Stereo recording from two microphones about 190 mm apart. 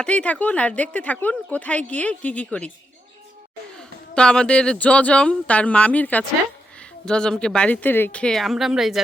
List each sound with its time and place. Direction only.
0.0 s speech: 5° left (ahead or behind)
3.8 s speech: 5° left (ahead or behind)